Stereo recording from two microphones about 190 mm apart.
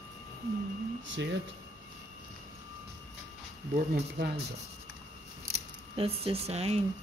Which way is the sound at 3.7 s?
55° right (ahead or behind).